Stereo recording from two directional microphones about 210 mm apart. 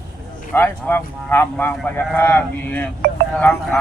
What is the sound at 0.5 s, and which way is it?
Speech, 10° left (ahead or behind).